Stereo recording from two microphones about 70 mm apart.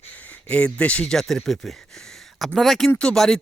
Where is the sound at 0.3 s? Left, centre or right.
Centre.